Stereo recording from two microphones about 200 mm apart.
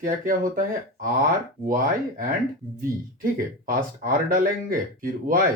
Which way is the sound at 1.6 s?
45° right (ahead or behind).